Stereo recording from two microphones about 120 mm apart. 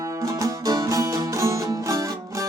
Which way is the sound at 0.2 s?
30° right (ahead or behind).